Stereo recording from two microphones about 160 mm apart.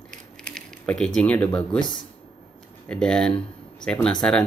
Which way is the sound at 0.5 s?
5° left (ahead or behind).